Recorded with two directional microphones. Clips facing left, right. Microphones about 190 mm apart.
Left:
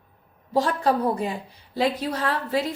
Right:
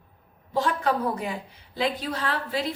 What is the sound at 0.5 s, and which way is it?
A woman's voice, 35° left (ahead or behind).